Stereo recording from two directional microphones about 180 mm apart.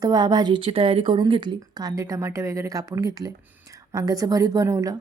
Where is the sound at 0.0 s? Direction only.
25° right (ahead or behind).